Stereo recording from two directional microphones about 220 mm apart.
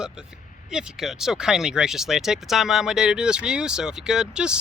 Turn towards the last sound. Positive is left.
turn(degrees=-5)  # may be behind; listen again after turning